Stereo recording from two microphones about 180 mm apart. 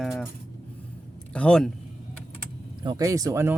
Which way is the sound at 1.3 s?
5° left (ahead or behind).